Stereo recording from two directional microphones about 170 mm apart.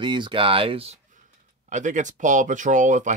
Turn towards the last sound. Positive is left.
turn(degrees=-45)  # may be behind; listen again after turning